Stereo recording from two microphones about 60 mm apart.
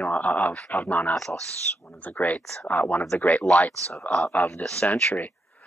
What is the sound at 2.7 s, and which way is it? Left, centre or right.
Speech, left.